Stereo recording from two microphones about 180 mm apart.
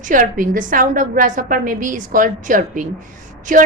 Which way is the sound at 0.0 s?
50° right (ahead or behind).